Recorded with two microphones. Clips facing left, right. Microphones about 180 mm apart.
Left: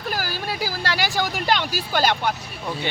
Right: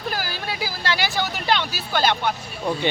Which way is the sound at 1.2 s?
10° left (ahead or behind).